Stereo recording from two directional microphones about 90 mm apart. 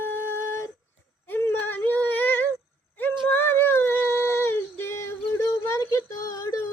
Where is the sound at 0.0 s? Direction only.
25° left (ahead or behind).